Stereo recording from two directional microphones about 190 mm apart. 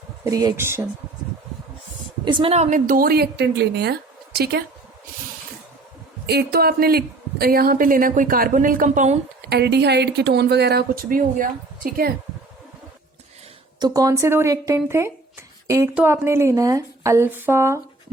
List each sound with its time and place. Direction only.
0.3 s speech: 20° right (ahead or behind)
2.2 s a woman's voice: 30° right (ahead or behind); by 4.6 s 55° right (ahead or behind)
6.2 s a woman's voice: 55° right (ahead or behind)
9.5 s a woman's voice: 60° right (ahead or behind)
13.7 s speech: 20° right (ahead or behind)